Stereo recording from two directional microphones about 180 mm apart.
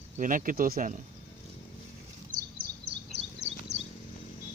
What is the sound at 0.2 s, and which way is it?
Speech, 50° right (ahead or behind).